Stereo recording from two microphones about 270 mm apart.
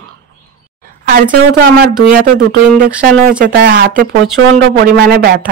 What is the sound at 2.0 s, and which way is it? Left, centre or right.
Speech, right.